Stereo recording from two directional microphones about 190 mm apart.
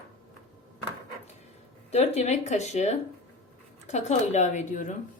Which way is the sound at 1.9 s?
35° left (ahead or behind).